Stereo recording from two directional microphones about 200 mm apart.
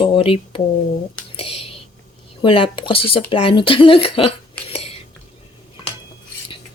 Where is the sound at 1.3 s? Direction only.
30° left (ahead or behind).